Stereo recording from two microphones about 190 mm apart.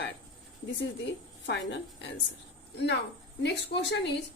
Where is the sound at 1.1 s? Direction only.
70° left (ahead or behind).